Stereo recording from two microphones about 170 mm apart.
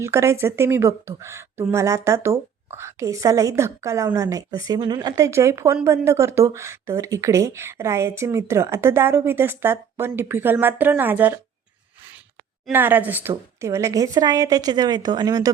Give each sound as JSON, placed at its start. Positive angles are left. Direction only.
{"t": 0.0, "sound": "speech", "side_deg": -15}
{"t": 12.7, "sound": "a woman's voice", "side_deg": -10}